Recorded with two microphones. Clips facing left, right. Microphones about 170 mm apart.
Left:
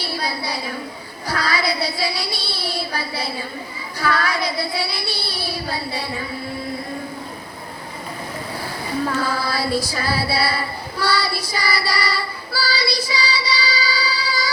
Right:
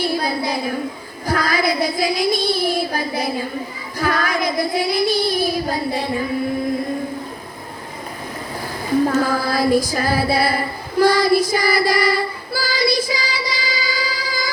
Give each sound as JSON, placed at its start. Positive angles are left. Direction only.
{"t": 0.2, "sound": "a sound", "side_deg": -50}
{"t": 1.3, "sound": "child singing", "side_deg": -50}
{"t": 4.0, "sound": "music", "side_deg": -45}
{"t": 4.4, "sound": "child singing", "side_deg": -45}
{"t": 9.0, "sound": "child singing", "side_deg": -45}